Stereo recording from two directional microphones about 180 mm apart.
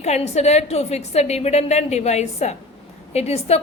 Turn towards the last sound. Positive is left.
turn(degrees=35)  # may be behind; listen again after turning